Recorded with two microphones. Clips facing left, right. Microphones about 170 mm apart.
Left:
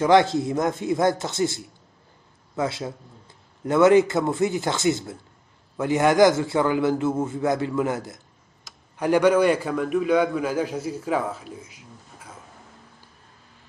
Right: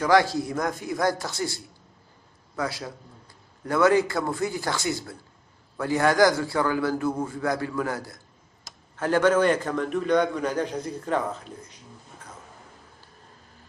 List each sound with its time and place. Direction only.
0.0 s a man's voice: 25° left (ahead or behind); by 12.4 s 10° left (ahead or behind)